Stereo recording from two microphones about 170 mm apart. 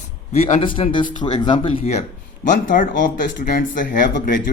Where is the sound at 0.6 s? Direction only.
30° left (ahead or behind).